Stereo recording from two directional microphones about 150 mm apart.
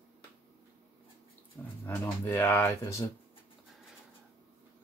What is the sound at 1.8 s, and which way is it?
Speech, 15° left (ahead or behind).